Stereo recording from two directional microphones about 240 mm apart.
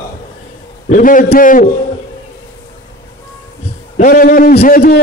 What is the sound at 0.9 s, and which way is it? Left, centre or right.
Speech, left.